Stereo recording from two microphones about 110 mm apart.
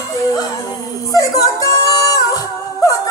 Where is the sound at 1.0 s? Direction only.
30° left (ahead or behind).